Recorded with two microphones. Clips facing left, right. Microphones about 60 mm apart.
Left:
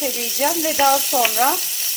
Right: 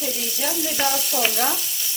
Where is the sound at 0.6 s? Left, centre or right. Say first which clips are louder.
Left 8 dB; left.